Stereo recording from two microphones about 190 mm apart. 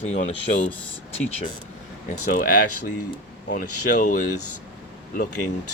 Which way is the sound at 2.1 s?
45° left (ahead or behind).